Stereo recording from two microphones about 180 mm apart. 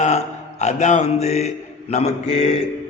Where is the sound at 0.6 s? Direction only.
40° left (ahead or behind).